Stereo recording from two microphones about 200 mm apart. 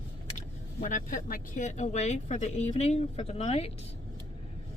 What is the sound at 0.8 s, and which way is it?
Speech, 40° left (ahead or behind).